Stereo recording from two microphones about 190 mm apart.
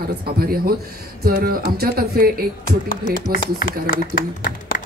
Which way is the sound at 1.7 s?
55° right (ahead or behind).